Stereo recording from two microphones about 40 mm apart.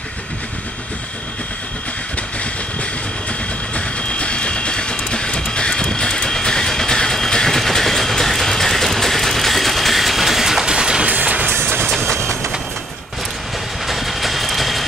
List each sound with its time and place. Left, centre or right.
3.7 s train: left; by 10.7 s centre
10.7 s music: right
11.1 s music: right
11.5 s train: right
12.0 s train: centre
13.8 s vehicle: centre